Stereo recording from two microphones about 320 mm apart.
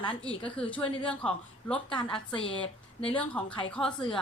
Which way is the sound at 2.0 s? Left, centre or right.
Centre.